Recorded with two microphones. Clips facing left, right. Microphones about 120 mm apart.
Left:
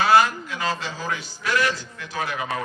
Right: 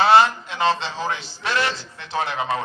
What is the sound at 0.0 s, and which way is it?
A man's voice, 25° right (ahead or behind).